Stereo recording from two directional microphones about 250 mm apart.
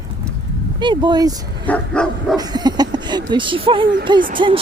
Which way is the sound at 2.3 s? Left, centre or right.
Centre.